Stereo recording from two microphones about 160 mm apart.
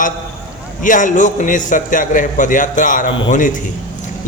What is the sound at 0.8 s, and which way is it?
A man's voice, 55° left (ahead or behind).